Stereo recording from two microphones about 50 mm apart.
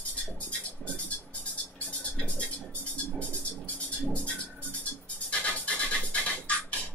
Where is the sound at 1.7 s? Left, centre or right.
Left.